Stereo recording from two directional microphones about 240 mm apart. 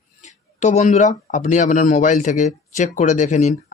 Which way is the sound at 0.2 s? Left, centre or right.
Left.